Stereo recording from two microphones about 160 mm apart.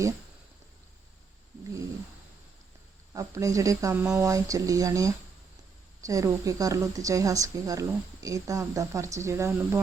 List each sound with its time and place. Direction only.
3.2 s a woman's voice: 20° right (ahead or behind)